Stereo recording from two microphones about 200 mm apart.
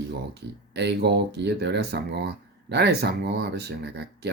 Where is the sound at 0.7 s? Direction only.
55° right (ahead or behind).